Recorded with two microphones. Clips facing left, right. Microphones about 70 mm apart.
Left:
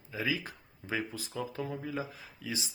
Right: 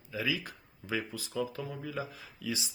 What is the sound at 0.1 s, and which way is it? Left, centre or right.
Speech, left.